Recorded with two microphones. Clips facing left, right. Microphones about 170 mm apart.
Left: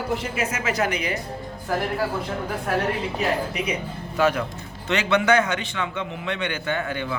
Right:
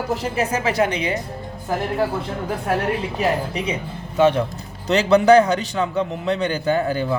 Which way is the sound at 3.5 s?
30° right (ahead or behind).